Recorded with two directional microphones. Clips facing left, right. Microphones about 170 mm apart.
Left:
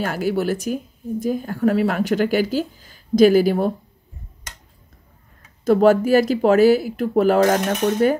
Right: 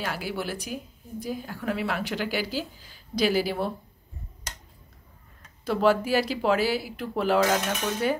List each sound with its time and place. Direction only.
0.0 s speech: 45° left (ahead or behind)
5.7 s speech: 45° left (ahead or behind)